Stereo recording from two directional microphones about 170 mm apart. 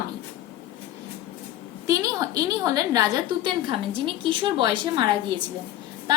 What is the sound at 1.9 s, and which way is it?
A woman's voice, 20° right (ahead or behind).